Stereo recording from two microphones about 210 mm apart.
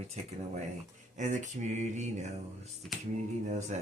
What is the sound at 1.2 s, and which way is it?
Speech, 35° right (ahead or behind).